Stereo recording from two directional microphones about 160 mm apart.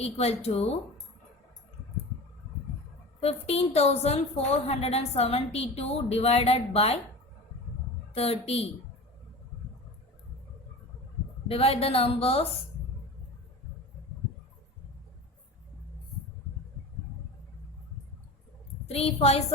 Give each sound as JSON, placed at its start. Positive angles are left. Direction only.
{"t": 0.0, "sound": "a woman's voice", "side_deg": 40}
{"t": 3.2, "sound": "a woman's voice", "side_deg": 40}
{"t": 8.1, "sound": "a woman's voice", "side_deg": 40}
{"t": 11.4, "sound": "a woman's voice", "side_deg": 35}
{"t": 18.9, "sound": "a woman's voice", "side_deg": 40}